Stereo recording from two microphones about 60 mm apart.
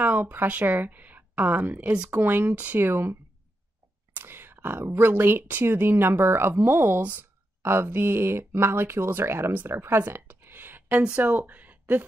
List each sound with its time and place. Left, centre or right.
0.0 s speech: right
2.8 s speech: right